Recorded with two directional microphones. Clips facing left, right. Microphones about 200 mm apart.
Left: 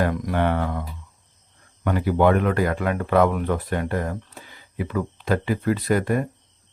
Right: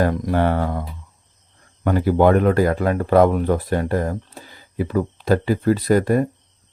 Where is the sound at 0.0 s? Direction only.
35° right (ahead or behind).